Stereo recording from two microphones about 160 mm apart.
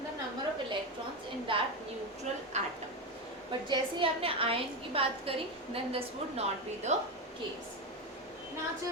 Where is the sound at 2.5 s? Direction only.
45° right (ahead or behind).